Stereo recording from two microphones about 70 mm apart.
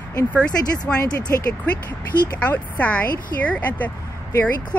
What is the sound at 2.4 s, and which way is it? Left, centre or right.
Speech, left.